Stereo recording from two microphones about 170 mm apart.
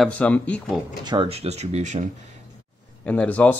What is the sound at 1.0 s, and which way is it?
Speech, 30° right (ahead or behind).